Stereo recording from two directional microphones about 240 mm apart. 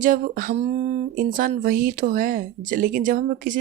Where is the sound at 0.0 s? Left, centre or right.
Right.